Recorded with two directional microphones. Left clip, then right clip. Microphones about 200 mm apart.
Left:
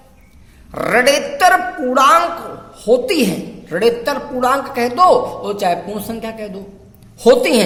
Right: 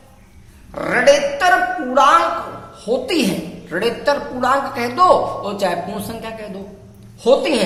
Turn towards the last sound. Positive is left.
turn(degrees=40)  # may be behind; listen again after turning